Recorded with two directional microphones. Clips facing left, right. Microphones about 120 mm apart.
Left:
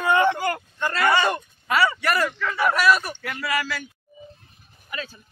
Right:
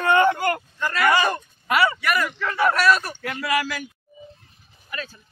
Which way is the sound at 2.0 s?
35° left (ahead or behind).